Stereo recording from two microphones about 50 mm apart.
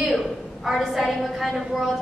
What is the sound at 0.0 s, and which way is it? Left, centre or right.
A woman's voice, centre.